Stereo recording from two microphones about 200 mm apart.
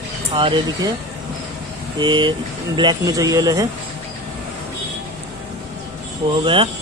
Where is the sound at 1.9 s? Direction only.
25° right (ahead or behind).